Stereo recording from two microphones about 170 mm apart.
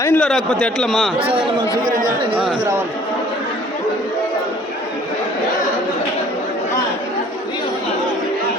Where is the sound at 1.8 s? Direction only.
55° right (ahead or behind).